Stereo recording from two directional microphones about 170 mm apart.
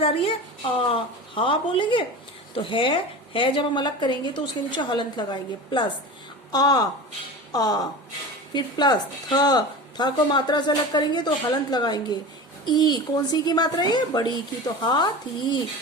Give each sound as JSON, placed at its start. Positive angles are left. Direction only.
{"t": 0.0, "sound": "speech", "side_deg": 35}
{"t": 1.4, "sound": "a woman's voice", "side_deg": 30}